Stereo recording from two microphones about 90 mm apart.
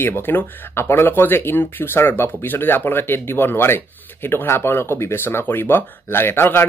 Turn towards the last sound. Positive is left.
turn(degrees=25)  # may be behind; listen again after turning